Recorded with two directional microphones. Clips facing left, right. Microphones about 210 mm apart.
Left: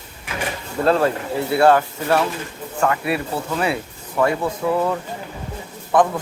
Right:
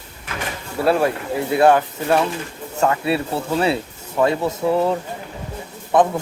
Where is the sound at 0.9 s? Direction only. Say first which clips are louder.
Even; 15° right (ahead or behind).